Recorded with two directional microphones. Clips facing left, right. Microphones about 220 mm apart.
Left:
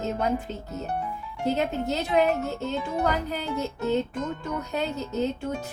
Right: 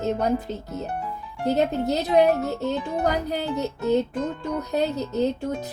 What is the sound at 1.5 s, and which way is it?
Speech, 40° right (ahead or behind).